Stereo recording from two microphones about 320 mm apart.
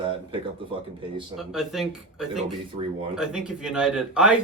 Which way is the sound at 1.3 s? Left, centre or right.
Centre.